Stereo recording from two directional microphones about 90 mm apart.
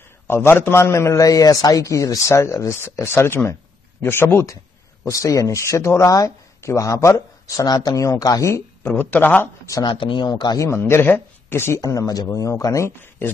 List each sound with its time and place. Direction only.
0.3 s speech: 25° left (ahead or behind)
8.8 s speech: 20° left (ahead or behind)
9.8 s speech: 65° left (ahead or behind)
10.6 s speech: 30° left (ahead or behind)
11.8 s speech: 40° left (ahead or behind)